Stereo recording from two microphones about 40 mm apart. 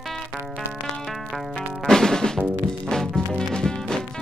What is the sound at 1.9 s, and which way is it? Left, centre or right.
Drum, centre.